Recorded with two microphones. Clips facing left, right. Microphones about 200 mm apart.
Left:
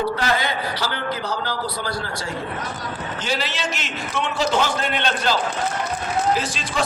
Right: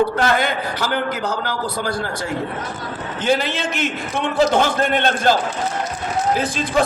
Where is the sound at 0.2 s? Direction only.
50° right (ahead or behind).